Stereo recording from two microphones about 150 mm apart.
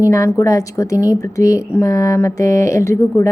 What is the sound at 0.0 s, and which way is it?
A woman's voice, 20° left (ahead or behind).